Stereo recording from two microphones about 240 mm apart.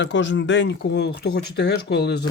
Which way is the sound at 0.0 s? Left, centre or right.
Left.